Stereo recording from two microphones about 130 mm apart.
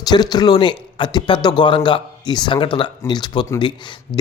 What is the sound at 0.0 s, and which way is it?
A man's voice, 30° left (ahead or behind).